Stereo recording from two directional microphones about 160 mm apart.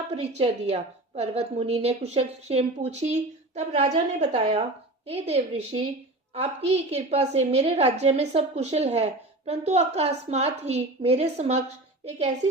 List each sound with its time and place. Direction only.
0.2 s a woman's voice: 40° right (ahead or behind)